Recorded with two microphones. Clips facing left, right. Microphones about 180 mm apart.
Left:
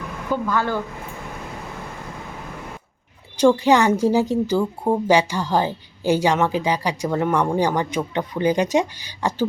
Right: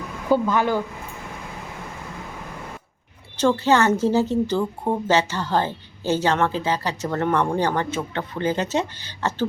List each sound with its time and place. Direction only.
0.4 s speech: 15° right (ahead or behind)
3.3 s a woman's voice: 10° left (ahead or behind)